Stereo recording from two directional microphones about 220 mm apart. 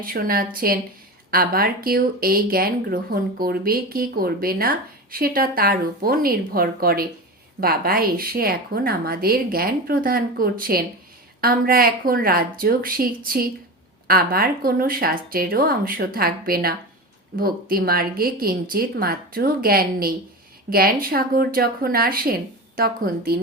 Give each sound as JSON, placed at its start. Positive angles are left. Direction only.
{"t": 0.0, "sound": "speech", "side_deg": -40}